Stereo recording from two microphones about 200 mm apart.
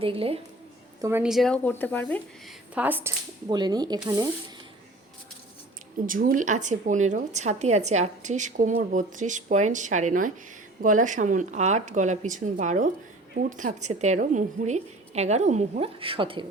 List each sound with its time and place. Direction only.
0.0 s speech: 30° right (ahead or behind)
1.0 s a woman's voice: 10° right (ahead or behind); by 2.6 s 10° left (ahead or behind)
2.7 s speech: 10° right (ahead or behind)
3.5 s speech: 20° right (ahead or behind)
6.1 s a woman's voice: 45° right (ahead or behind); by 16.5 s 25° right (ahead or behind)